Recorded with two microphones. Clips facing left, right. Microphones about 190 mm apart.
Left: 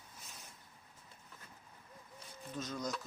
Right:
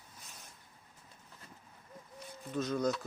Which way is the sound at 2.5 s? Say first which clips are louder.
Right 8 dB; 60° right (ahead or behind).